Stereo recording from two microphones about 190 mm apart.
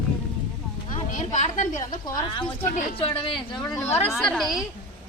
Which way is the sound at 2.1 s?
25° left (ahead or behind).